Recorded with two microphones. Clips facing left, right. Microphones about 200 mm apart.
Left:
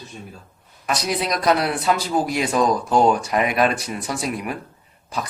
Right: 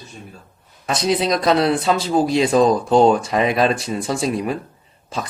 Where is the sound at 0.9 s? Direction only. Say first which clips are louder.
Right 5 dB; 25° right (ahead or behind).